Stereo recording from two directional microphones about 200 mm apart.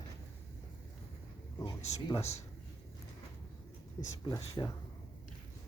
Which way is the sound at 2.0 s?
15° left (ahead or behind).